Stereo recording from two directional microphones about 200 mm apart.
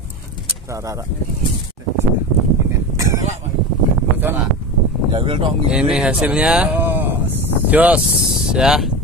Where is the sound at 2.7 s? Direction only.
15° right (ahead or behind).